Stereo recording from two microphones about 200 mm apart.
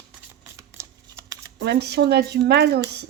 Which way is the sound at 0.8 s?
10° right (ahead or behind).